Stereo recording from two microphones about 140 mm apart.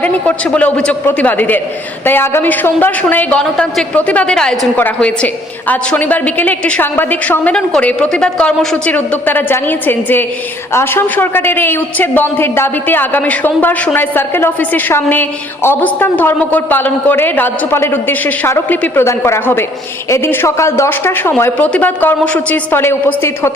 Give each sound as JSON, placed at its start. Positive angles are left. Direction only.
{"t": 0.0, "sound": "a man's voice", "side_deg": 10}